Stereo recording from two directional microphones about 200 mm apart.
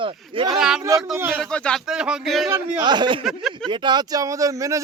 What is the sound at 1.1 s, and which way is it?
Speech, 10° right (ahead or behind).